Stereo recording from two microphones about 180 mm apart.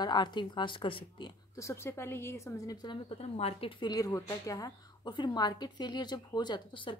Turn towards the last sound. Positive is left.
turn(degrees=25)  # may be behind; listen again after turning